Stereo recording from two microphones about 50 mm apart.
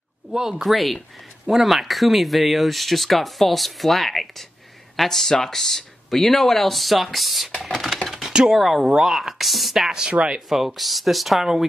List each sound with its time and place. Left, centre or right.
0.3 s speech: centre
0.6 s speech: centre
7.6 s computer keyboard: centre
8.3 s a sound: centre
8.5 s speech: centre
10.0 s speech: right
10.5 s speech: centre